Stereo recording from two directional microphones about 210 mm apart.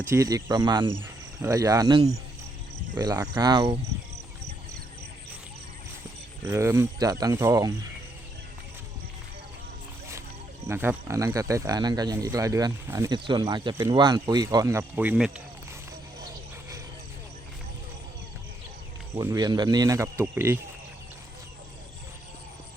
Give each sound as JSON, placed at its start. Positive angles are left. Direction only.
{"t": 0.0, "sound": "speech", "side_deg": -15}
{"t": 6.4, "sound": "speech", "side_deg": -15}
{"t": 10.7, "sound": "speech", "side_deg": -10}
{"t": 19.1, "sound": "speech", "side_deg": -20}